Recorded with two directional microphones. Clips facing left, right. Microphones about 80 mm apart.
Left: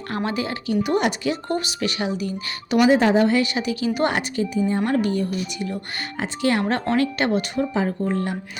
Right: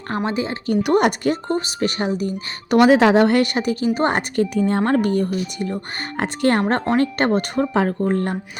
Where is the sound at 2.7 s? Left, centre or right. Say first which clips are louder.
Right 4 dB; right.